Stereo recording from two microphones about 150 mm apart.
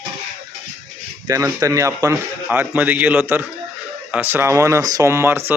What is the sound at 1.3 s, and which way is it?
Speech, 20° right (ahead or behind).